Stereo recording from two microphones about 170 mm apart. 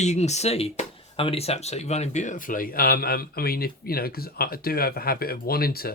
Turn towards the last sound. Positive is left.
turn(degrees=60)  # may be behind; listen again after turning